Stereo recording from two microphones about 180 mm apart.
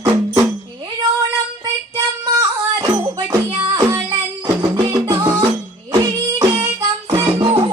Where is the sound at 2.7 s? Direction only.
25° right (ahead or behind).